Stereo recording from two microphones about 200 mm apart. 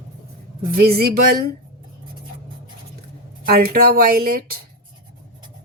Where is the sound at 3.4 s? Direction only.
50° right (ahead or behind).